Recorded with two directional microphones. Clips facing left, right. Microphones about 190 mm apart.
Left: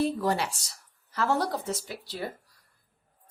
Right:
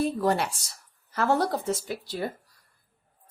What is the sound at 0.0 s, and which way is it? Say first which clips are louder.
A woman's voice: right 2 dB; 55° right (ahead or behind).